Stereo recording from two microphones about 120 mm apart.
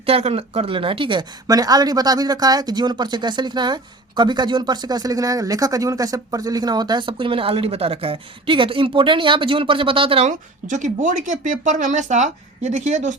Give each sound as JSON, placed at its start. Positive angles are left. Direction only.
{"t": 0.0, "sound": "speech", "side_deg": -55}
{"t": 1.5, "sound": "speech", "side_deg": -30}
{"t": 10.2, "sound": "speech", "side_deg": -90}